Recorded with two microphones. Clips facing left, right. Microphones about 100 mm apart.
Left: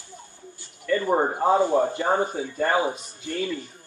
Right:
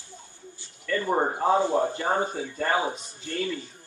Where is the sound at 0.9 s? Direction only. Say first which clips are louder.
Left 3 dB; 15° left (ahead or behind).